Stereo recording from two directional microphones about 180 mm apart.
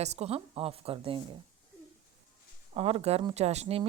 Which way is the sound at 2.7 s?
35° right (ahead or behind).